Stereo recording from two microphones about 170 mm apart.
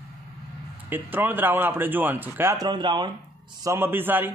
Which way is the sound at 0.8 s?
10° right (ahead or behind).